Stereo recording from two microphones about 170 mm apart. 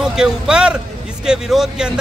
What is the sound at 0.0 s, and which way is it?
A man's voice, 5° right (ahead or behind).